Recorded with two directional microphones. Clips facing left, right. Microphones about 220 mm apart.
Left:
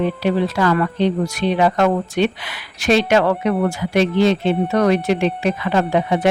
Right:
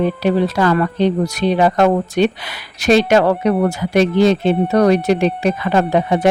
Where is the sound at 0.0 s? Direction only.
40° right (ahead or behind).